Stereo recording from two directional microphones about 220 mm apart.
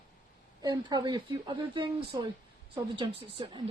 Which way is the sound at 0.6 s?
20° right (ahead or behind).